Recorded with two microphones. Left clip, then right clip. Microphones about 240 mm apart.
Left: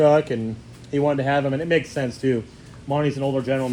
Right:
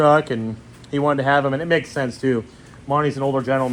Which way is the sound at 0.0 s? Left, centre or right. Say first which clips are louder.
Right 1 dB; right.